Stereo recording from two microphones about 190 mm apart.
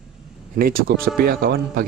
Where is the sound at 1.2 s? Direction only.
50° right (ahead or behind).